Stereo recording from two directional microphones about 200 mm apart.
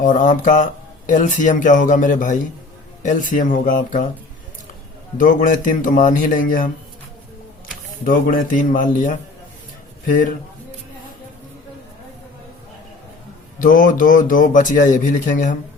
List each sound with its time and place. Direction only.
0.0 s speech: 40° left (ahead or behind)
5.1 s speech: 40° left (ahead or behind)
8.0 s a man's voice: 45° left (ahead or behind)
13.6 s speech: 40° left (ahead or behind)